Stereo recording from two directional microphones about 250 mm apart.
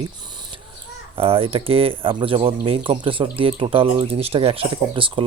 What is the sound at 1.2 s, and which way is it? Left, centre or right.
Speech, right.